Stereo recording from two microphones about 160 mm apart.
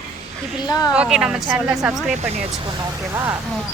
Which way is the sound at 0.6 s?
25° left (ahead or behind).